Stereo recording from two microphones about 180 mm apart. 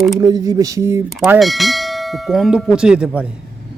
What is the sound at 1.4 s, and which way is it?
Speech, centre (ahead or behind).